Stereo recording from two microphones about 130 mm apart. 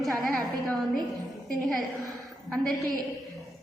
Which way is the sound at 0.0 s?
Centre (ahead or behind).